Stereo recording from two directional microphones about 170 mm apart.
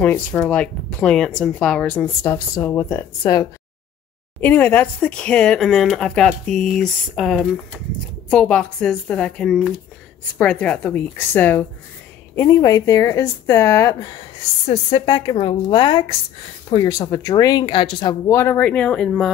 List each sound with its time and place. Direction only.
0.0 s speech: 10° left (ahead or behind)
14.7 s a woman's voice: 35° left (ahead or behind); by 19.3 s 5° left (ahead or behind)